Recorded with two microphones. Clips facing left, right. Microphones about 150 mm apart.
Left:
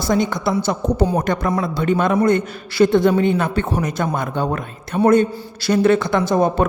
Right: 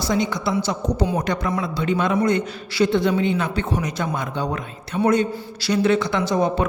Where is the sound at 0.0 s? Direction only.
50° left (ahead or behind).